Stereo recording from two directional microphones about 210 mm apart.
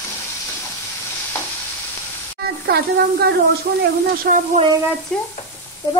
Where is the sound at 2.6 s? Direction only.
45° right (ahead or behind).